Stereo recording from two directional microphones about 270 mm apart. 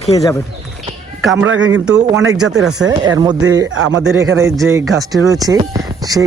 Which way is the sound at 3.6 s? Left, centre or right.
Right.